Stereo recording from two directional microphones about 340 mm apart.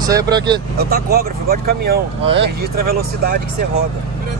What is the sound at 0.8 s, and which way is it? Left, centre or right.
Speech, right.